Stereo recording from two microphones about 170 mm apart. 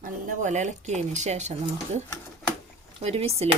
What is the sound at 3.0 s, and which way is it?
Speech, 35° right (ahead or behind).